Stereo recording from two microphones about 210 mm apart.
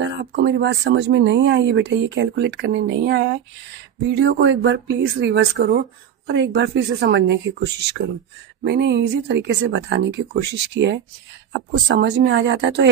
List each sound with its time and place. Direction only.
0.0 s speech: 55° right (ahead or behind)
12.0 s speech: 55° right (ahead or behind)